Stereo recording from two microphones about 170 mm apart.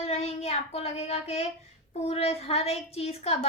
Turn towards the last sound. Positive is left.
turn(degrees=35)  # may be behind; listen again after turning